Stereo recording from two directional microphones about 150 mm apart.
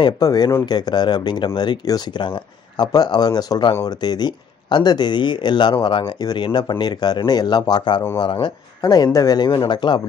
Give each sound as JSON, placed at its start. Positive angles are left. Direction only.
{"t": 0.0, "sound": "speech", "side_deg": 25}